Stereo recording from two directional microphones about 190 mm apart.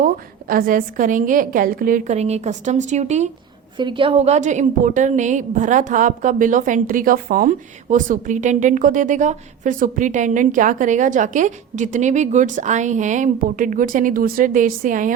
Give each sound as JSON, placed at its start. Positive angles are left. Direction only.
{"t": 0.0, "sound": "a woman's voice", "side_deg": -50}
{"t": 3.8, "sound": "a woman's voice", "side_deg": -25}